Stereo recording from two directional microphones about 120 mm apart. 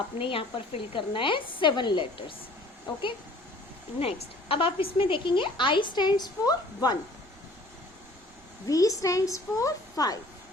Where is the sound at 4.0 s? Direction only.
55° left (ahead or behind); by 7.0 s 35° left (ahead or behind).